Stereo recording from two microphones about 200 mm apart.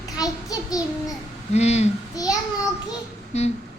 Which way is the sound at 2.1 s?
15° left (ahead or behind).